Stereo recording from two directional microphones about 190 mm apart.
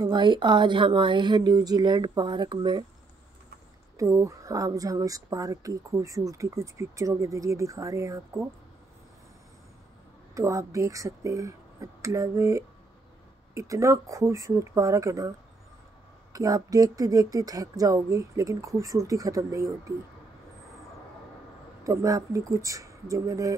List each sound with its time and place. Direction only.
0.0 s speech: 25° right (ahead or behind)
3.9 s speech: 15° right (ahead or behind)
10.3 s speech: 15° right (ahead or behind)
16.3 s speech: 20° right (ahead or behind)
21.8 s speech: 15° right (ahead or behind)